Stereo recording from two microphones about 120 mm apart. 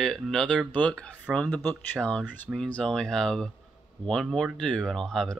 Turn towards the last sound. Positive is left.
turn(degrees=5)  # may be behind; listen again after turning